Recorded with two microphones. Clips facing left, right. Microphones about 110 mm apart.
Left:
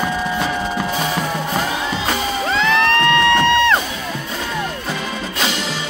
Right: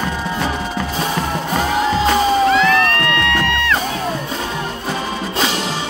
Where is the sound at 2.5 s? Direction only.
30° left (ahead or behind).